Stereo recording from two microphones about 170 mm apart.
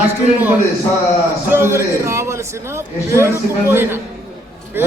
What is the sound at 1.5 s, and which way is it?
A man's voice, 15° right (ahead or behind).